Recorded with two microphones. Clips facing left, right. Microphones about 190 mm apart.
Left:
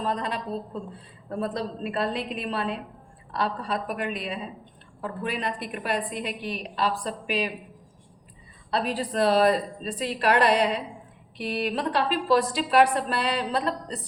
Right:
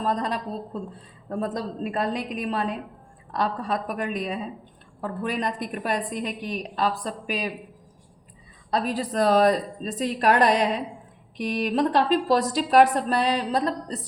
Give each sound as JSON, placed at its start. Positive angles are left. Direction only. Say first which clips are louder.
{"t": 0.0, "sound": "a woman's voice", "louder": "right 2 dB", "side_deg": -40}
{"t": 8.7, "sound": "a woman's voice", "louder": "right 1 dB", "side_deg": -40}